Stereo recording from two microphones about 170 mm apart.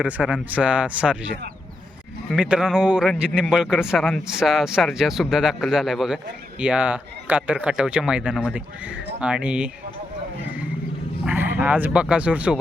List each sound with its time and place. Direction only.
0.0 s a man's voice: 5° right (ahead or behind)